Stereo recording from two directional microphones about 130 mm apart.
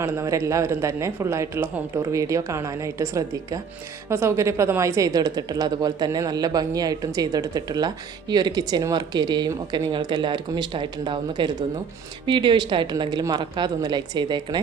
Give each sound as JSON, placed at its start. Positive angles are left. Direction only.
{"t": 0.0, "sound": "speech", "side_deg": -20}